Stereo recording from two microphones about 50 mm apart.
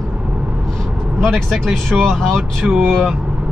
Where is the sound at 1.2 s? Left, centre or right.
Centre.